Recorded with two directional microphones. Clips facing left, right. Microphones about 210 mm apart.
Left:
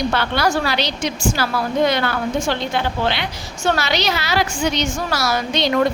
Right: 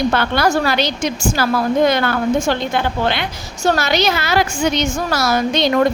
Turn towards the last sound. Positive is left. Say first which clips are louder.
# right 4 dB
turn(degrees=-50)  # may be behind; listen again after turning